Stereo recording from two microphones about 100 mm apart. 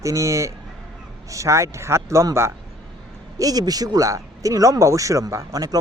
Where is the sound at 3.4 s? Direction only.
40° right (ahead or behind).